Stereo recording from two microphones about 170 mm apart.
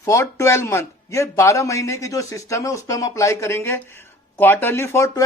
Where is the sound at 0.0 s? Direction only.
15° left (ahead or behind).